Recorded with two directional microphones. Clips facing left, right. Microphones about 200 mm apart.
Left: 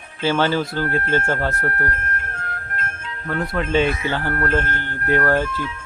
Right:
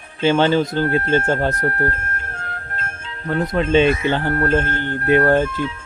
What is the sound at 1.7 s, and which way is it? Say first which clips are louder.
Music: right 3 dB; 30° right (ahead or behind).